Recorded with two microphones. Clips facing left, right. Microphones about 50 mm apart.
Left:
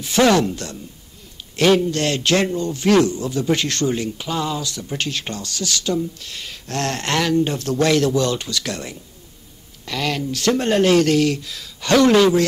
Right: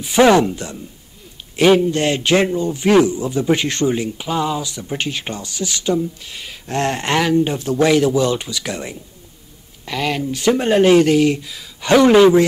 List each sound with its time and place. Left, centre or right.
0.0 s a man's voice: centre